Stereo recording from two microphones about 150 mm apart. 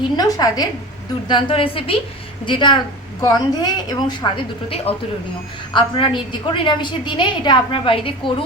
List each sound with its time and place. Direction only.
0.2 s a woman's voice: 25° left (ahead or behind)
4.9 s a man's voice: 40° left (ahead or behind)
5.7 s a woman's voice: 30° left (ahead or behind)